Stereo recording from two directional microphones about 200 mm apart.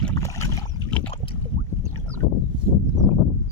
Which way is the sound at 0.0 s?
10° left (ahead or behind).